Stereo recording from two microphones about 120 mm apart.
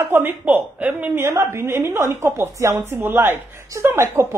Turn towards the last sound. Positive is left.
turn(degrees=-20)  # may be behind; listen again after turning